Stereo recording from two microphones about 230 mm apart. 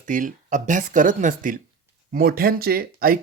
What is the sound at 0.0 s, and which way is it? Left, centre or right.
Speech, right.